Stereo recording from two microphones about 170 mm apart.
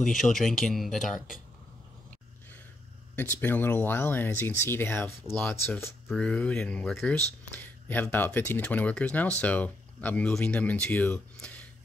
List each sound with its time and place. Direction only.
0.1 s speech: centre (ahead or behind)
1.0 s speech: 50° left (ahead or behind)
3.2 s speech: 10° left (ahead or behind)